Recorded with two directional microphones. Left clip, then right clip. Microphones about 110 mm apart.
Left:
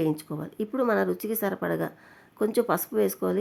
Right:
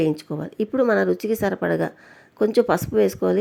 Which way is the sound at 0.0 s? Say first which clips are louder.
Right 5 dB; 25° right (ahead or behind).